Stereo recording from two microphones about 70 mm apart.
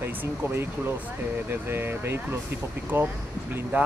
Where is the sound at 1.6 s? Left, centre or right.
Right.